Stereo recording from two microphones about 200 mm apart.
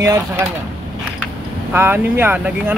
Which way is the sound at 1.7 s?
10° right (ahead or behind).